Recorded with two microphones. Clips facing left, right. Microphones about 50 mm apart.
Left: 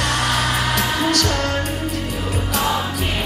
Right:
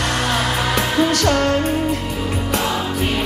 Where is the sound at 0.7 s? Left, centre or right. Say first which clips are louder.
Right 2 dB; right.